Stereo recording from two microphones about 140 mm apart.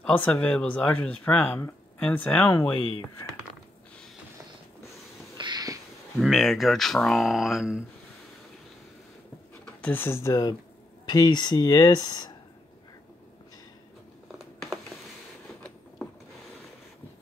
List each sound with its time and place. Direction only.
0.0 s speech: 10° left (ahead or behind)
5.4 s a sound: 30° right (ahead or behind)
6.1 s speech: centre (ahead or behind)
9.8 s speech: 15° left (ahead or behind); by 12.4 s 30° left (ahead or behind)